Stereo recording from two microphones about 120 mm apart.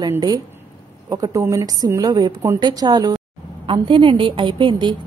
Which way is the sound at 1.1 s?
25° right (ahead or behind).